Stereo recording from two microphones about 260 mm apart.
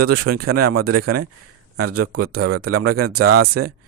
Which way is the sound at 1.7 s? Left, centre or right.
Right.